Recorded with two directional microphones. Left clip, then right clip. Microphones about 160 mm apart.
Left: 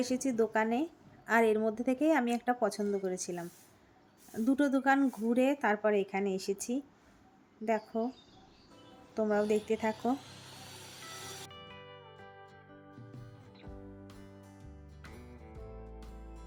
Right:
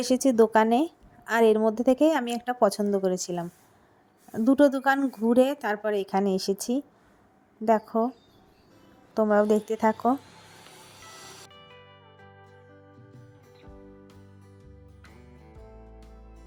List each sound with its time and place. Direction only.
0.0 s a woman's voice: 45° right (ahead or behind)
7.9 s a woman's voice: 35° right (ahead or behind)
9.2 s a woman's voice: 35° right (ahead or behind)
11.4 s music: centre (ahead or behind)
13.6 s music: centre (ahead or behind)